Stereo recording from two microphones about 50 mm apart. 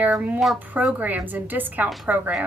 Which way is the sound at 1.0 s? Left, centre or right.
Right.